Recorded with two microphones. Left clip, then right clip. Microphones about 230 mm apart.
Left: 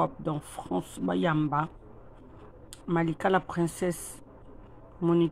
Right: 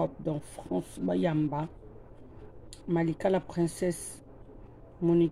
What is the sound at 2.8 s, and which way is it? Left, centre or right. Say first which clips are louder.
Speech: left 1 dB; centre.